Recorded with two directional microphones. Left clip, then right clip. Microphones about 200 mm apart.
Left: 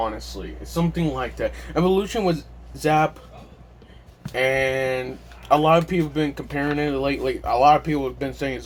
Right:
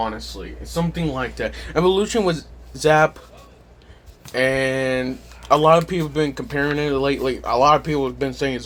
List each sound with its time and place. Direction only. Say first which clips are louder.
0.7 s speech: right 1 dB; 35° right (ahead or behind)
4.3 s speech: right 1 dB; 35° right (ahead or behind)